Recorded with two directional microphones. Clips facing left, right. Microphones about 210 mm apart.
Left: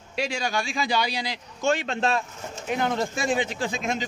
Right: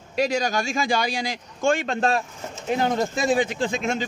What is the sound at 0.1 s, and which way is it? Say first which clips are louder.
Speech: right 5 dB; 45° right (ahead or behind).